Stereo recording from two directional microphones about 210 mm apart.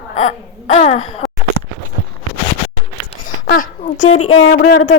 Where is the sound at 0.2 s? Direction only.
35° left (ahead or behind).